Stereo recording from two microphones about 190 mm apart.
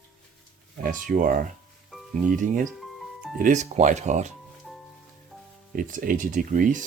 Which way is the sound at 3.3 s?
40° right (ahead or behind).